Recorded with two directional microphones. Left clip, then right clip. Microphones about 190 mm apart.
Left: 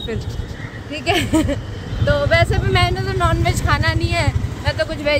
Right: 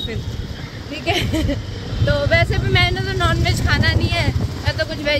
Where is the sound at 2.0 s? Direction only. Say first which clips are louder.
Left 1 dB; 5° left (ahead or behind).